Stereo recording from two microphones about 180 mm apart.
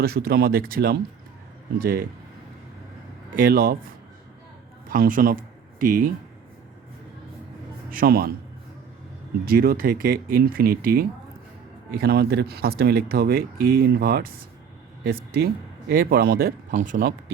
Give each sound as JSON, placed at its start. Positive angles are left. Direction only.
{"t": 0.0, "sound": "speech", "side_deg": -60}
{"t": 3.3, "sound": "speech", "side_deg": -55}
{"t": 4.9, "sound": "speech", "side_deg": -50}
{"t": 7.9, "sound": "speech", "side_deg": -55}
{"t": 9.5, "sound": "speech", "side_deg": -55}